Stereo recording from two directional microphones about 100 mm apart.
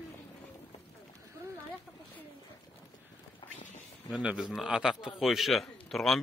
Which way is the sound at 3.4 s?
55° left (ahead or behind).